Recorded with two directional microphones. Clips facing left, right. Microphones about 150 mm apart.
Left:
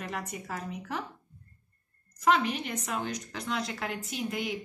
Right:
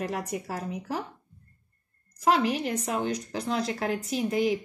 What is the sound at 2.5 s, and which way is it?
Speech, 35° right (ahead or behind).